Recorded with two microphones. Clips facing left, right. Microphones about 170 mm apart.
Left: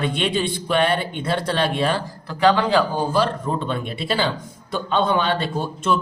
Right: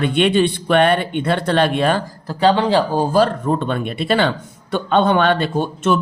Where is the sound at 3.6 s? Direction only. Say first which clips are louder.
Right 4 dB; 60° right (ahead or behind).